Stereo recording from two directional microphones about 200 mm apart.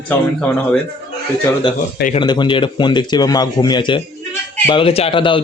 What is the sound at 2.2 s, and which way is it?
A man's voice, 25° left (ahead or behind).